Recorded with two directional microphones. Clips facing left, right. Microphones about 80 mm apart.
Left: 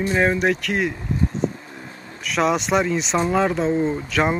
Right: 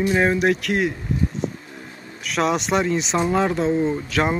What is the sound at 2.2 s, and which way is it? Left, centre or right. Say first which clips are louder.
Speech: left 1 dB; centre.